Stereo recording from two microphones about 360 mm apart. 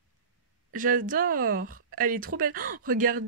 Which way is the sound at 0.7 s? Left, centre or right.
Right.